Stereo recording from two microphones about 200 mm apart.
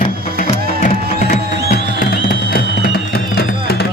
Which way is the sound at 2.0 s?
45° left (ahead or behind).